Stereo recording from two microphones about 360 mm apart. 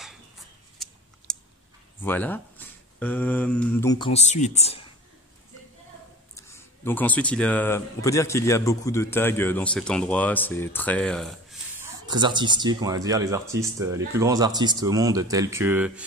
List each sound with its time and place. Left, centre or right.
0.7 s a sound: centre
2.0 s speech: centre
6.3 s speech: centre
12.1 s speech: centre